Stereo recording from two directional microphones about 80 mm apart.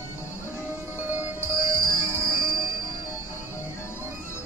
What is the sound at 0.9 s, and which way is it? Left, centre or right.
Music, right.